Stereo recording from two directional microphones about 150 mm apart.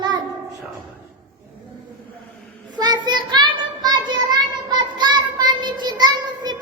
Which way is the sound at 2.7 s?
30° right (ahead or behind).